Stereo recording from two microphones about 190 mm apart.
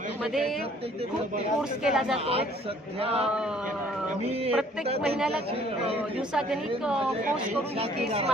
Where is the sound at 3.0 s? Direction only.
30° right (ahead or behind).